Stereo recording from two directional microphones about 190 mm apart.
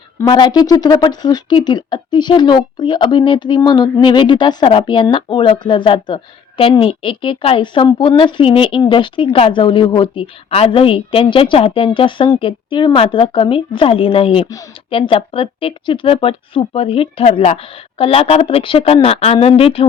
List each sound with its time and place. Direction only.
0.3 s a woman's voice: 25° left (ahead or behind)